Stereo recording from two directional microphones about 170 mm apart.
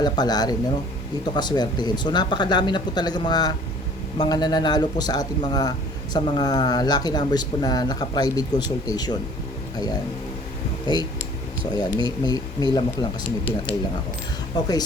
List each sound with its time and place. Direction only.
0.0 s speech: 25° left (ahead or behind)
11.7 s speech: 25° left (ahead or behind)